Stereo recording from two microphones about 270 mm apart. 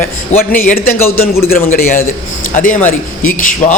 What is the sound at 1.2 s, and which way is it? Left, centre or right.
Speech, left.